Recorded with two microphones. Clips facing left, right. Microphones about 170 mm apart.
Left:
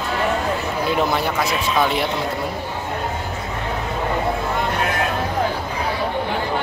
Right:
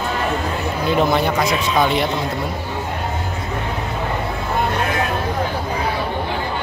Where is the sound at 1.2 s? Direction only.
5° left (ahead or behind).